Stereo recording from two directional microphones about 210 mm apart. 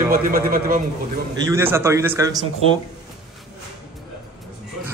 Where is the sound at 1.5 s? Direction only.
10° right (ahead or behind).